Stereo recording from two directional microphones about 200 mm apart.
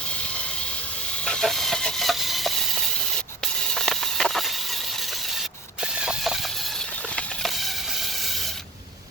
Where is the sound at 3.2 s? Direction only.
5° left (ahead or behind).